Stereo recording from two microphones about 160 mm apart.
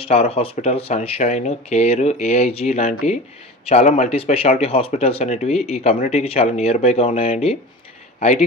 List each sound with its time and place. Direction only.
0.0 s speech: 40° left (ahead or behind)